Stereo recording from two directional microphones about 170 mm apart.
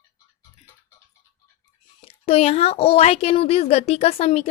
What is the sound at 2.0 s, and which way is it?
A woman's voice, 35° left (ahead or behind).